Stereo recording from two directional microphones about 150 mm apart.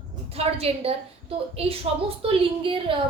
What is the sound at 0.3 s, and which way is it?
A woman's voice, 40° right (ahead or behind).